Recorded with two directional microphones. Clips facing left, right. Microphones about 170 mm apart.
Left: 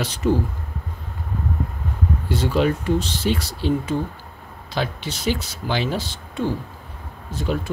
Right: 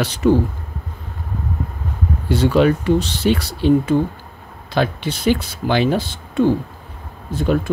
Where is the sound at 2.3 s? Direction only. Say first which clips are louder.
Right 6 dB; 70° right (ahead or behind).